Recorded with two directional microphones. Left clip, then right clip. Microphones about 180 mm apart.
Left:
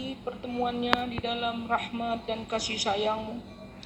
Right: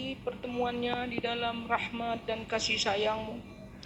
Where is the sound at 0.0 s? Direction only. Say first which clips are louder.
Left 1 dB; 5° left (ahead or behind).